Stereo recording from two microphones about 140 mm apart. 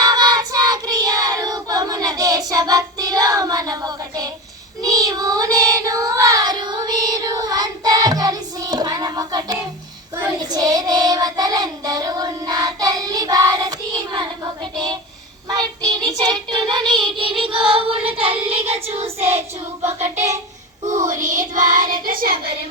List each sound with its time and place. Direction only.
0.0 s child singing: 30° right (ahead or behind)
16.0 s child singing: 30° right (ahead or behind); by 19.3 s 45° right (ahead or behind)
19.8 s child singing: 20° right (ahead or behind)
20.8 s child singing: 65° right (ahead or behind)
22.0 s child singing: 90° right